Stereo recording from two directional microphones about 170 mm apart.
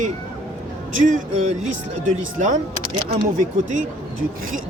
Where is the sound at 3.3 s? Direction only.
45° right (ahead or behind).